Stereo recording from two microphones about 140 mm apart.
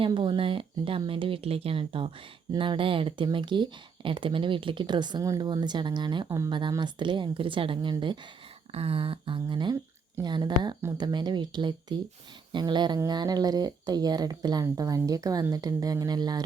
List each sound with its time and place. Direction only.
0.0 s speech: 40° right (ahead or behind)
8.7 s speech: 45° right (ahead or behind); by 16.4 s 30° right (ahead or behind)